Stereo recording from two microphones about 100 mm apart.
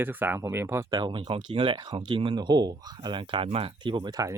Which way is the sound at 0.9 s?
50° right (ahead or behind).